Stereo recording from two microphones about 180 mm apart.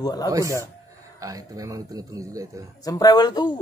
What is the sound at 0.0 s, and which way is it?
Speech, 20° left (ahead or behind).